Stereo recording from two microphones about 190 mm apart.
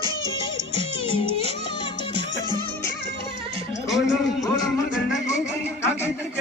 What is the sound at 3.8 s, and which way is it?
Music, centre (ahead or behind).